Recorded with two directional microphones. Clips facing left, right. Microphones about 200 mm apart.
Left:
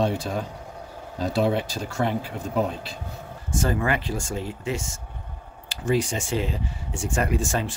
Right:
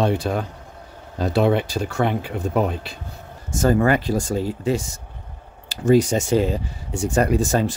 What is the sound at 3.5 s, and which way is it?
Speech, 40° right (ahead or behind).